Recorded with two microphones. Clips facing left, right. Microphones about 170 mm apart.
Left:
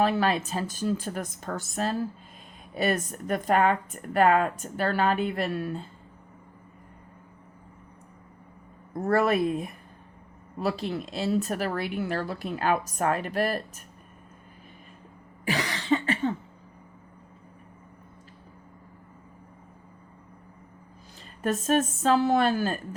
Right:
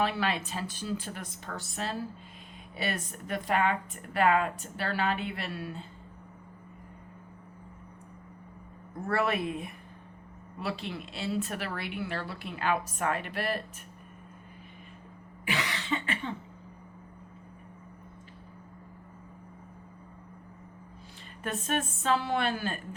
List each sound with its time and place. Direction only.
0.0 s speech: 40° left (ahead or behind)
9.0 s speech: 40° left (ahead or behind)
15.4 s cough: 40° left (ahead or behind)
21.4 s speech: 40° left (ahead or behind)